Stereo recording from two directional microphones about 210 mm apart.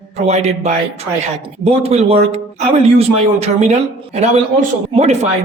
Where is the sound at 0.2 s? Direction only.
30° right (ahead or behind).